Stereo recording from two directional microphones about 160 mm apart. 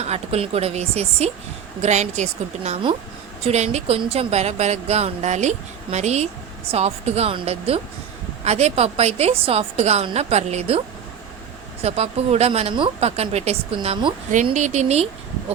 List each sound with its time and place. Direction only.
0.0 s a woman's voice: 40° right (ahead or behind)